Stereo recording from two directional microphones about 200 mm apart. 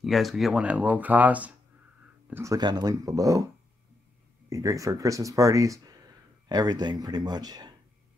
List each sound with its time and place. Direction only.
0.0 s speech: centre (ahead or behind); by 3.4 s 15° right (ahead or behind)
4.5 s speech: 15° right (ahead or behind)